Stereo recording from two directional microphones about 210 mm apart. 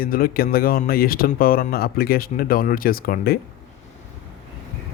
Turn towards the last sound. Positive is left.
turn(degrees=45)  # may be behind; listen again after turning